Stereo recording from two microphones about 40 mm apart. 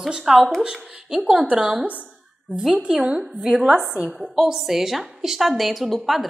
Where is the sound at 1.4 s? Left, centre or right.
Right.